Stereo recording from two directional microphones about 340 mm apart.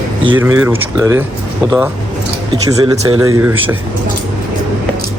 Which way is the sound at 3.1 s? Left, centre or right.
Right.